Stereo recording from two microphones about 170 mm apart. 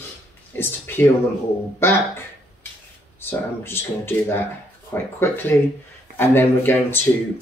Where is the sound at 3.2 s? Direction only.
15° left (ahead or behind).